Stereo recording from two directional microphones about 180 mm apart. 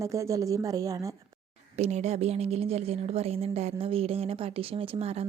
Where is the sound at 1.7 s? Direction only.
40° right (ahead or behind).